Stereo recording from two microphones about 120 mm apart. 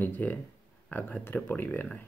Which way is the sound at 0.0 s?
15° left (ahead or behind).